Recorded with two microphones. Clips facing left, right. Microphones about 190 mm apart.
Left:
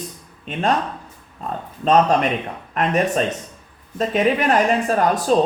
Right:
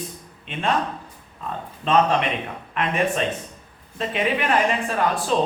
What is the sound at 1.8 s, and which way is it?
Speech, 40° left (ahead or behind).